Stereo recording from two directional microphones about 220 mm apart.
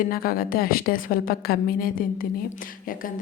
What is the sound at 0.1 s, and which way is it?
A woman's voice, 40° left (ahead or behind).